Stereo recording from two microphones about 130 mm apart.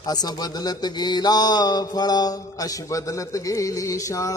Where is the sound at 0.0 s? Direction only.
30° left (ahead or behind).